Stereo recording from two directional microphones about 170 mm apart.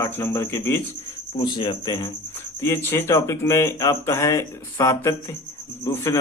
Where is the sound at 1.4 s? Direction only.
25° left (ahead or behind).